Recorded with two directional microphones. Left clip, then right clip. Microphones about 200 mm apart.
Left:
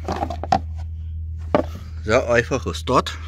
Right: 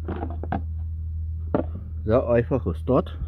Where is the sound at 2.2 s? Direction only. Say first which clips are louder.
Left 3 dB; 20° right (ahead or behind).